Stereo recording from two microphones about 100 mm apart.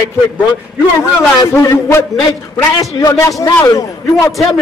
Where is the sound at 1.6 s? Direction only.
25° left (ahead or behind).